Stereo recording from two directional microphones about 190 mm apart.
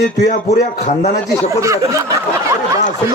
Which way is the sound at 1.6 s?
15° right (ahead or behind).